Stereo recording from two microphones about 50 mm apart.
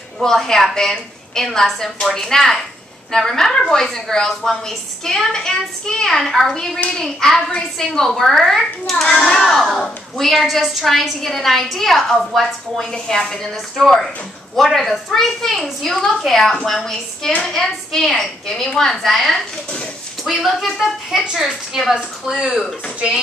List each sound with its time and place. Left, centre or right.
0.2 s a woman's voice: centre